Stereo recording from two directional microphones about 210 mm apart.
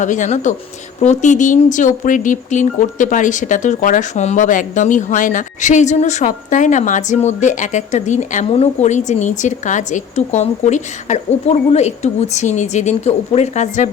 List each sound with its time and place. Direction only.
0.0 s speech: 35° left (ahead or behind)